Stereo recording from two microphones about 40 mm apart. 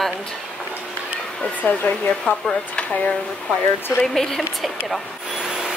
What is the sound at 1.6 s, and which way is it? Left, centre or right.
Speech, left.